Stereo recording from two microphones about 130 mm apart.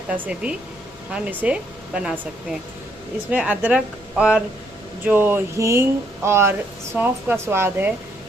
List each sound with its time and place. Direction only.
0.1 s speech: 10° right (ahead or behind)